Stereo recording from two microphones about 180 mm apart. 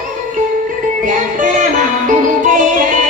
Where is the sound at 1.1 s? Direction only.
45° right (ahead or behind).